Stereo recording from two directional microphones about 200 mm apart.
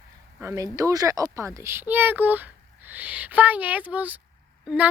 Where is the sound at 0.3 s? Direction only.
15° right (ahead or behind).